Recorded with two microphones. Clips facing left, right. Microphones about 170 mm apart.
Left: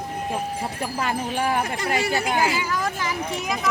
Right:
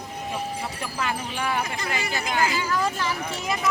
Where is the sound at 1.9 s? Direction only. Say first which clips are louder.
Left 5 dB; 65° left (ahead or behind).